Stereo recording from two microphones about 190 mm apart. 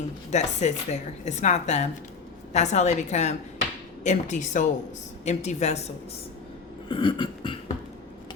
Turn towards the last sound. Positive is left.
turn(degrees=25)  # may be behind; listen again after turning